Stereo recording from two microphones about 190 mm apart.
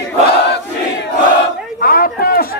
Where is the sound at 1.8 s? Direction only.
50° left (ahead or behind).